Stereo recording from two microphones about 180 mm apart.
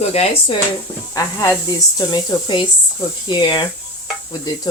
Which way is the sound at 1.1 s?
20° left (ahead or behind).